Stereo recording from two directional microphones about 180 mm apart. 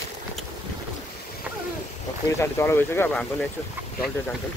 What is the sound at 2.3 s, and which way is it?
Speech, 15° left (ahead or behind).